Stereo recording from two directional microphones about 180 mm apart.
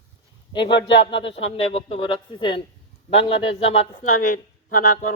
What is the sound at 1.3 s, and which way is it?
A woman's voice, 30° left (ahead or behind).